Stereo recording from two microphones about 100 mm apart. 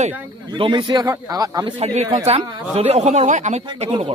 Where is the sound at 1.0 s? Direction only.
35° right (ahead or behind).